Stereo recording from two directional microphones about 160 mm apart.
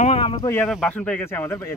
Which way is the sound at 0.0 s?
35° left (ahead or behind).